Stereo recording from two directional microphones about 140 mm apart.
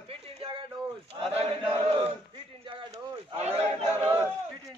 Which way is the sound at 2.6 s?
40° right (ahead or behind).